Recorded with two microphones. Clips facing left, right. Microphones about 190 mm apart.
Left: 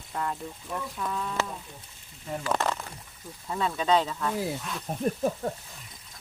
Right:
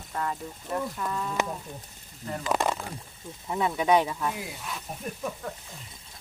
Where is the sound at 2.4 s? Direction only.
15° right (ahead or behind).